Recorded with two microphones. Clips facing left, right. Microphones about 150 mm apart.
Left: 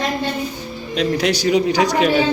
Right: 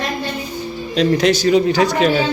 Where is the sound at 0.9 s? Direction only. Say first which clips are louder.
Right 4 dB; 10° left (ahead or behind).